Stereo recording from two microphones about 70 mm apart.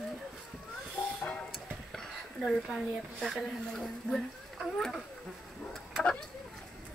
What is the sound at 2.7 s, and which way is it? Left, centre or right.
Speech, centre.